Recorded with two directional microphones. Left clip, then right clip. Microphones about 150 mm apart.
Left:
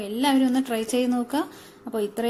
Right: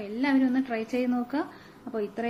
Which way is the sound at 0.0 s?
25° left (ahead or behind).